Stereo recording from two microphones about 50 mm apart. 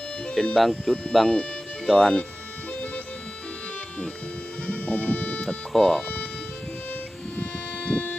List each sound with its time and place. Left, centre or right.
0.4 s speech: centre
4.6 s music: left
5.4 s speech: centre
7.9 s a sound: left